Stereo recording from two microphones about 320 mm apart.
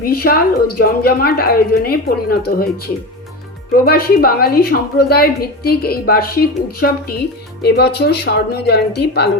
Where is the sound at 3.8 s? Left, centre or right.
Left.